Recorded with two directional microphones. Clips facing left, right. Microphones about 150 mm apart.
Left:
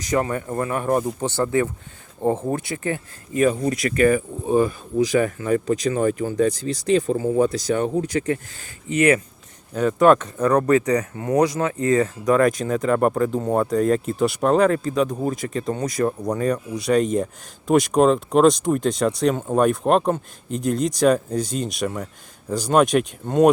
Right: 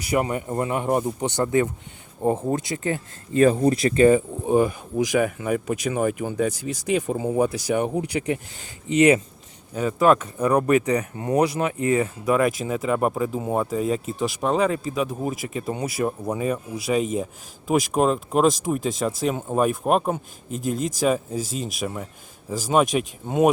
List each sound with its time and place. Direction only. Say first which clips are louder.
0.0 s speech: left 1 dB; 15° right (ahead or behind)
9.7 s speech: left 3 dB; 5° right (ahead or behind)